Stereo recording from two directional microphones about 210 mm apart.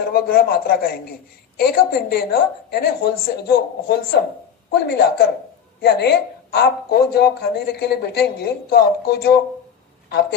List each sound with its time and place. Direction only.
0.1 s speech: 45° left (ahead or behind)